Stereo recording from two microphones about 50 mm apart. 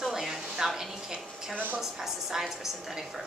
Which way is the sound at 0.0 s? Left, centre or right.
Centre.